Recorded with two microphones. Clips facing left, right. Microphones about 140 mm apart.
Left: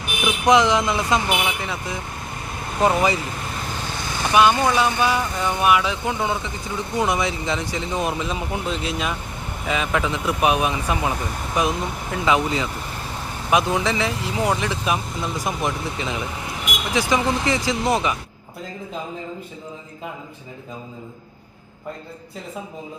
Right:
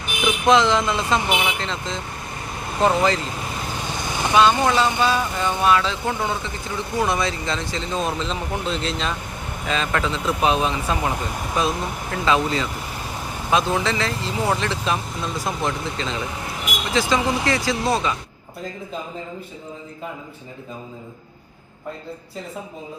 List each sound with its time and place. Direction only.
0.2 s speech: 15° left (ahead or behind)
4.3 s speech: 15° left (ahead or behind)
17.2 s speech: centre (ahead or behind)
17.7 s speech: 20° left (ahead or behind)